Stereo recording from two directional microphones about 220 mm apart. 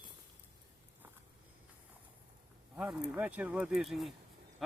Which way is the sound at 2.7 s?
5° right (ahead or behind).